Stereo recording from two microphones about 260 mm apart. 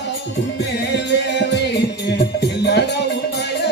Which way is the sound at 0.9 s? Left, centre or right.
Left.